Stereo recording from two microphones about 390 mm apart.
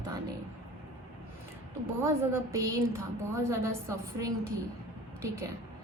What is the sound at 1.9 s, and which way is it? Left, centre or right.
A woman's voice, centre.